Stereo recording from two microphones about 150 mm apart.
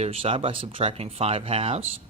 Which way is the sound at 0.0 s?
40° right (ahead or behind).